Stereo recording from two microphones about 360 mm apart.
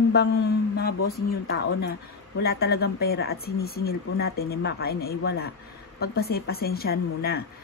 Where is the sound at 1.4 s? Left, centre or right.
Left.